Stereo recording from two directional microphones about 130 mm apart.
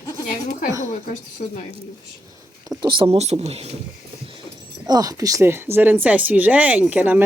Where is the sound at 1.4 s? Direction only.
90° left.